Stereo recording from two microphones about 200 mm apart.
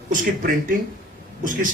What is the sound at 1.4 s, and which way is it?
Speech, 40° right (ahead or behind).